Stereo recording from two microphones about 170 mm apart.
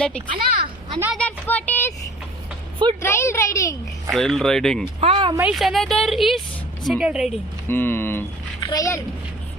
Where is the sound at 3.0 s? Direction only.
15° left (ahead or behind).